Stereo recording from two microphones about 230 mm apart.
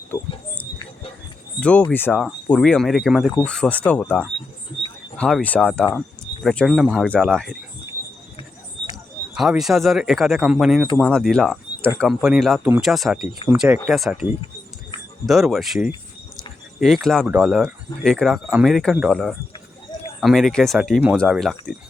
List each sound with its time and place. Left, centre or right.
0.1 s a sound: centre
1.6 s speech: centre
9.4 s speech: centre
15.3 s speech: centre
16.8 s speech: centre
19.9 s bird: centre
20.2 s speech: centre